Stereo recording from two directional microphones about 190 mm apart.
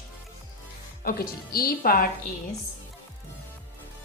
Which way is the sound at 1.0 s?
50° left (ahead or behind).